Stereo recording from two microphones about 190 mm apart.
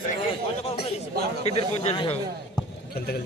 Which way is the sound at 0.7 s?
30° left (ahead or behind).